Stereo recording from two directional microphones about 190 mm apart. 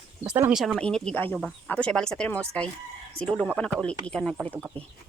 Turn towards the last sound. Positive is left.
turn(degrees=0)  # may be behind; listen again after turning